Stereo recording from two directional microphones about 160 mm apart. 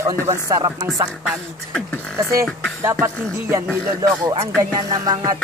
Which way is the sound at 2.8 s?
15° right (ahead or behind).